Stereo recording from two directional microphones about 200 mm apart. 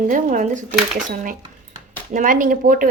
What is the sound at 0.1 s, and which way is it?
A woman's voice, 40° right (ahead or behind).